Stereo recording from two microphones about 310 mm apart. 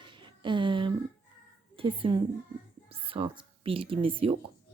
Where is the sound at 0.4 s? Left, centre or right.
Centre.